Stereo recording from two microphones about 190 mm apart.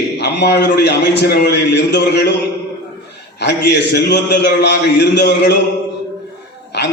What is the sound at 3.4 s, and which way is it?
A man's voice, 65° left (ahead or behind).